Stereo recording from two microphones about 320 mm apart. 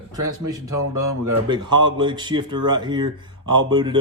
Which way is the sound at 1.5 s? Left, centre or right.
Centre.